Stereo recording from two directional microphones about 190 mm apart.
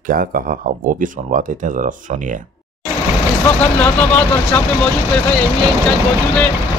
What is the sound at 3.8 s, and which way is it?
Speech, 10° left (ahead or behind).